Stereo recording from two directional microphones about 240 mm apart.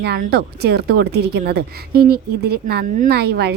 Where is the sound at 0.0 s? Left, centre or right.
Right.